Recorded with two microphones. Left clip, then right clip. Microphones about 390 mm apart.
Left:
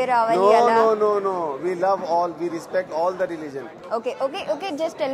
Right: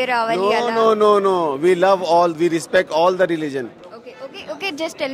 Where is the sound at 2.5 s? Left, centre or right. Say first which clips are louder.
Right 7 dB; right.